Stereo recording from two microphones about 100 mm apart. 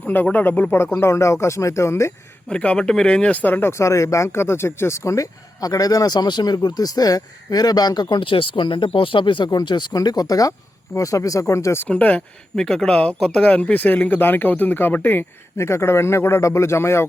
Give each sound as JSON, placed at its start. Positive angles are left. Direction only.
{"t": 0.0, "sound": "speech", "side_deg": 15}
{"t": 2.5, "sound": "speech", "side_deg": 10}
{"t": 11.9, "sound": "speech", "side_deg": 15}